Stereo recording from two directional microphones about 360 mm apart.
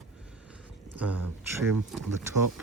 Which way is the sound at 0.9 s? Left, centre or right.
Right.